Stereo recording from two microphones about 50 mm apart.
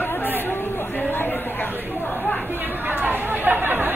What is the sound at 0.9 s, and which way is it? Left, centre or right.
Speech, left.